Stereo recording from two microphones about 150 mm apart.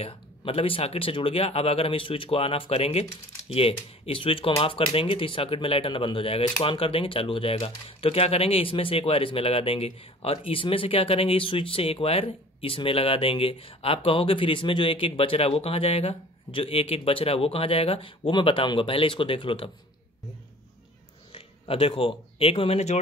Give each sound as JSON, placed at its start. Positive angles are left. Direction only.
{"t": 0.0, "sound": "speech", "side_deg": 40}
{"t": 21.3, "sound": "speech", "side_deg": 40}